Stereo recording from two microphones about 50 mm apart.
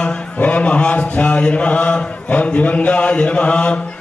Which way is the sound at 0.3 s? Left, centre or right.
Left.